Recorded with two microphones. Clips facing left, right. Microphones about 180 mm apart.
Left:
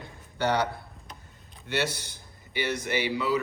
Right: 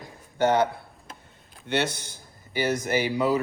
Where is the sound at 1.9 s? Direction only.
50° right (ahead or behind).